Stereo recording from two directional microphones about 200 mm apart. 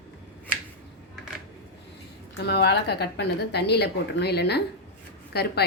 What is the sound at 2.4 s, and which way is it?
A woman's voice, 55° left (ahead or behind).